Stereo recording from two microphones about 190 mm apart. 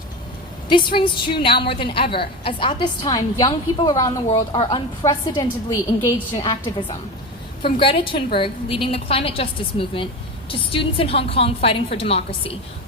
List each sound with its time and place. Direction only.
0.9 s a woman's voice: 25° left (ahead or behind)